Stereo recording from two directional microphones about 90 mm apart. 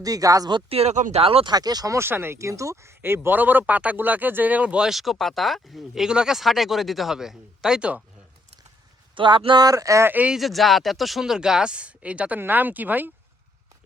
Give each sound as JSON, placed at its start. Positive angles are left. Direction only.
{"t": 0.0, "sound": "speech", "side_deg": -40}
{"t": 0.8, "sound": "speech", "side_deg": -90}
{"t": 1.5, "sound": "speech", "side_deg": -50}
{"t": 2.0, "sound": "speech", "side_deg": -25}
{"t": 9.1, "sound": "speech", "side_deg": -65}
{"t": 9.6, "sound": "speech", "side_deg": -40}
{"t": 10.1, "sound": "speech", "side_deg": -15}
{"t": 10.3, "sound": "speech", "side_deg": 0}